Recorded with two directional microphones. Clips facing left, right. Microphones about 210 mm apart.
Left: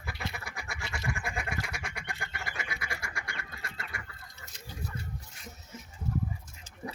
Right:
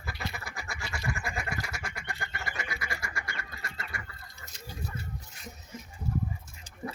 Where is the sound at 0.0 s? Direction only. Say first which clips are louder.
Right 1 dB; centre (ahead or behind).